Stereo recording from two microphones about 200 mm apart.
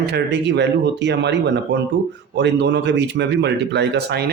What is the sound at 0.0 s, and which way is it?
Speech, 55° right (ahead or behind).